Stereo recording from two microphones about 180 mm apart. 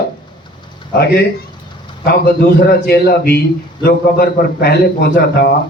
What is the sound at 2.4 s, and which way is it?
A man's voice, 60° left (ahead or behind).